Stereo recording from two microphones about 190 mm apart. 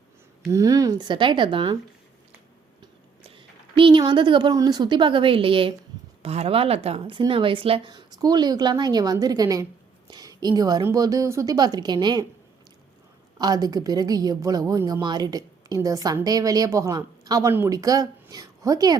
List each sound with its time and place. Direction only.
0.5 s a woman's voice: 15° right (ahead or behind)
3.2 s a woman's voice: 25° right (ahead or behind)
13.4 s a woman's voice: 20° right (ahead or behind)